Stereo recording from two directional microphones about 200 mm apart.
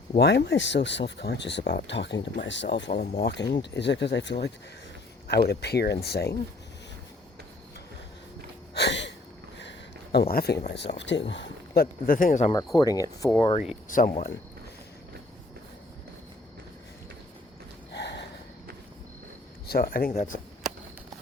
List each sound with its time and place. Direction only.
0.2 s speech: 55° left (ahead or behind)
2.9 s speech: 40° left (ahead or behind)
3.2 s speech: 60° left (ahead or behind)
8.7 s a sound: 60° left (ahead or behind)
10.7 s speech: 60° left (ahead or behind); by 12.5 s 40° left (ahead or behind)
12.7 s speech: 20° left (ahead or behind); by 14.1 s 40° left (ahead or behind)
17.9 s a sound: 60° left (ahead or behind)
19.6 s speech: 50° left (ahead or behind)